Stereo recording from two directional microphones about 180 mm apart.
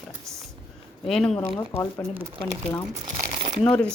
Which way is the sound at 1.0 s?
Centre (ahead or behind).